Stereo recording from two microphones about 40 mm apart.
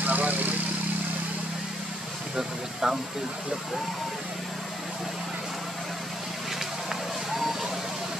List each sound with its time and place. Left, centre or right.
0.0 s vehicle: right
2.3 s speech: centre
6.9 s vehicle: centre